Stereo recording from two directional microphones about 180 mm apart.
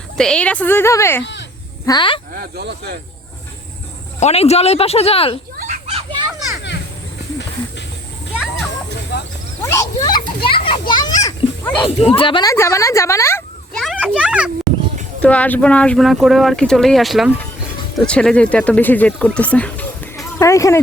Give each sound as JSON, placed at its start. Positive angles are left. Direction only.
{"t": 0.2, "sound": "a woman's voice", "side_deg": 5}
{"t": 1.2, "sound": "snake", "side_deg": 80}
{"t": 1.9, "sound": "speech", "side_deg": 25}
{"t": 2.3, "sound": "speech", "side_deg": -60}
{"t": 4.2, "sound": "speech", "side_deg": 35}
{"t": 5.5, "sound": "children playing", "side_deg": -45}
{"t": 9.1, "sound": "a sound", "side_deg": 65}
{"t": 9.6, "sound": "a sound", "side_deg": 15}
{"t": 10.5, "sound": "children playing", "side_deg": 30}
{"t": 12.0, "sound": "a woman's voice", "side_deg": 30}
{"t": 13.7, "sound": "a sound", "side_deg": -5}
{"t": 15.2, "sound": "speech", "side_deg": 10}